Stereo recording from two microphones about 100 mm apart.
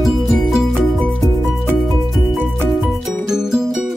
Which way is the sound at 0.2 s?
Centre (ahead or behind).